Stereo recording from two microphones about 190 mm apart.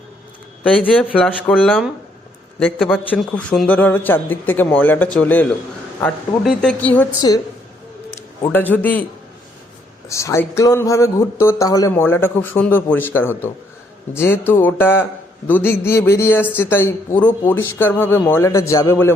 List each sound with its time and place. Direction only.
0.6 s speech: 5° left (ahead or behind)
7.2 s a woman's voice: 20° left (ahead or behind)
8.5 s speech: 10° left (ahead or behind)
10.1 s speech: 15° left (ahead or behind)